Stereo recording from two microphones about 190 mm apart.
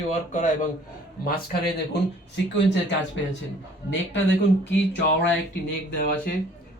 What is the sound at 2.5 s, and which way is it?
Speech, 70° left (ahead or behind).